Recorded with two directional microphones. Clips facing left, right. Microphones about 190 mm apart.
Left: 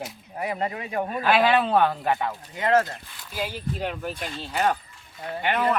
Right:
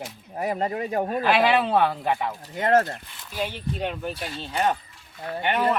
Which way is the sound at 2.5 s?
50° right (ahead or behind).